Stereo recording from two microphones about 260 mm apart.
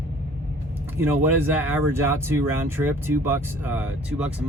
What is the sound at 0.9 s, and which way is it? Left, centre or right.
Speech, centre.